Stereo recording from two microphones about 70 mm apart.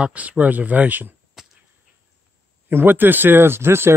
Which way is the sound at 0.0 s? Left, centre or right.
Right.